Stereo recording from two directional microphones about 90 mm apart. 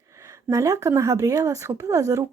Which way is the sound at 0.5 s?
40° right (ahead or behind).